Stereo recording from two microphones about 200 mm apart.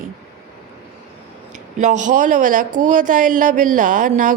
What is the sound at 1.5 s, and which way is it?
A woman's voice, 40° right (ahead or behind).